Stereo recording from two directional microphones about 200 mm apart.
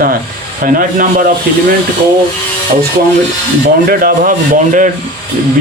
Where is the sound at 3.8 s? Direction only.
45° right (ahead or behind).